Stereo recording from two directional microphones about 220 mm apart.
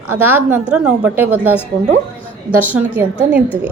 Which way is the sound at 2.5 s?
10° right (ahead or behind).